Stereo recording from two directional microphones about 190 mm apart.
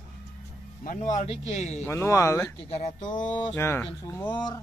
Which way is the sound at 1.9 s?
15° left (ahead or behind).